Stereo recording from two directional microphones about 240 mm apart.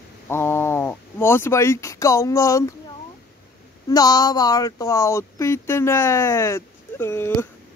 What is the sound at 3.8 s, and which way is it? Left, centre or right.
Speech, centre.